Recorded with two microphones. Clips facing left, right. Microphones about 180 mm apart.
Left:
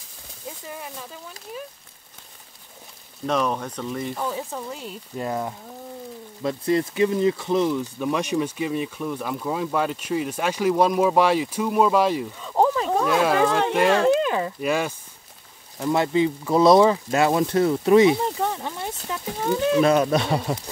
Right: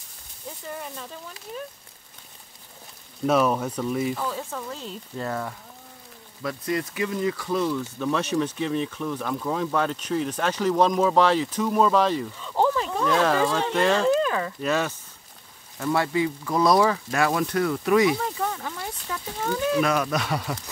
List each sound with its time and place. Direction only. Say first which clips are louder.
0.7 s speech: right 3 dB; 5° left (ahead or behind)
3.3 s speech: right 3 dB; 5° right (ahead or behind)
4.2 s speech: left 2 dB; 15° left (ahead or behind)
6.4 s speech: left 5 dB; 30° left (ahead or behind); by 13.9 s 10° left (ahead or behind)
14.2 s a sound: left 2 dB; 20° left (ahead or behind)
14.6 s speech: left 1 dB; 10° left (ahead or behind); by 20.5 s 25° left (ahead or behind)